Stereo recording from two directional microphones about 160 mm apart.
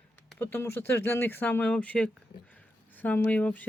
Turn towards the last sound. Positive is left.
turn(degrees=10)  # may be behind; listen again after turning